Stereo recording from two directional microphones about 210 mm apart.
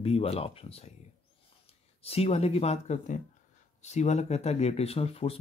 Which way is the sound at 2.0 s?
30° left (ahead or behind).